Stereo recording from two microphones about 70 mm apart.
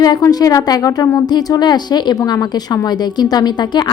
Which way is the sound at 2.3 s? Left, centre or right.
Left.